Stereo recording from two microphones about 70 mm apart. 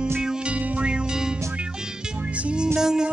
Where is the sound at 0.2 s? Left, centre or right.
Centre.